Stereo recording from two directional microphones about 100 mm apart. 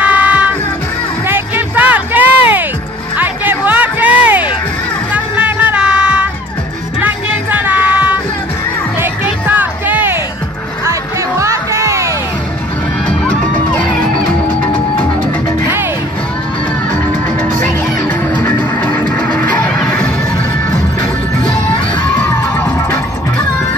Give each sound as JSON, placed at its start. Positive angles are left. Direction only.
{"t": 0.0, "sound": "music", "side_deg": -15}
{"t": 5.1, "sound": "a sound", "side_deg": -15}
{"t": 7.0, "sound": "music", "side_deg": -15}
{"t": 10.9, "sound": "music", "side_deg": -30}
{"t": 17.6, "sound": "music", "side_deg": 15}
{"t": 22.0, "sound": "music", "side_deg": 20}